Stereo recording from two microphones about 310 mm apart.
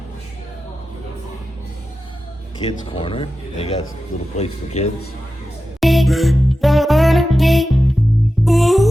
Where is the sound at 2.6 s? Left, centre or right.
Centre.